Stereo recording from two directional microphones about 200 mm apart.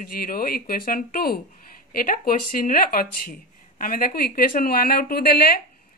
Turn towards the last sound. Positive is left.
turn(degrees=50)  # may be behind; listen again after turning